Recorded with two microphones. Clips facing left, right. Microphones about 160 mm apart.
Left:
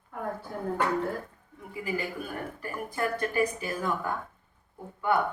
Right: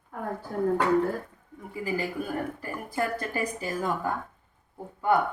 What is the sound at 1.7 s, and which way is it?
A woman's voice, 35° right (ahead or behind).